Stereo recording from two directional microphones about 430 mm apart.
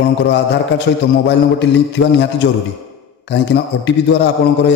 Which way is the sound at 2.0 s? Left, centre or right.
Left.